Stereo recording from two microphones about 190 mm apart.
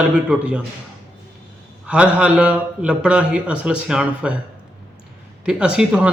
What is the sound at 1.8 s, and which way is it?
Speech, 5° right (ahead or behind).